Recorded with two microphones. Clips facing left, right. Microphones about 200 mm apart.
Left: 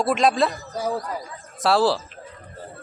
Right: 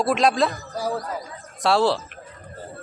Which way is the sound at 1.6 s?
Centre (ahead or behind).